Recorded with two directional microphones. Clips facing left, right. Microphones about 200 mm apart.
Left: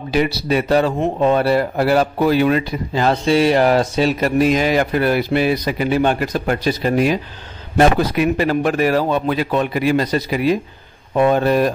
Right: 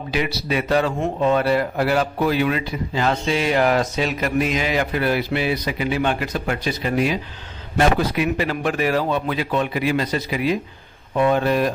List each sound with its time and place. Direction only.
0.1 s a man's voice: 35° left (ahead or behind)